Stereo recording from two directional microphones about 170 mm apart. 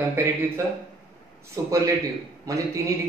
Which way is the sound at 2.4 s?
20° right (ahead or behind).